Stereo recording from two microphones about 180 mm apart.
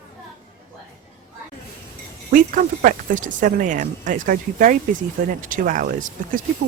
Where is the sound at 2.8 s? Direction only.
45° right (ahead or behind).